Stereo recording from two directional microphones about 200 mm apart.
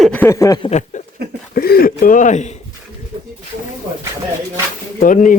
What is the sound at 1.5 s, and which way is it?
Speech, 50° left (ahead or behind).